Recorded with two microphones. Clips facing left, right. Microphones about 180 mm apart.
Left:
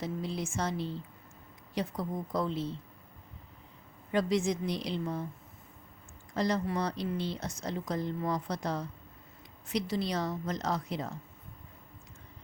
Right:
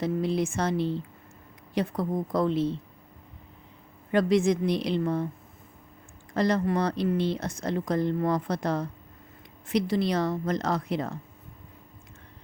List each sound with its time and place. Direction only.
0.0 s speech: 65° right (ahead or behind)
1.7 s speech: 55° right (ahead or behind)
4.1 s speech: 65° right (ahead or behind)
6.3 s speech: 65° right (ahead or behind)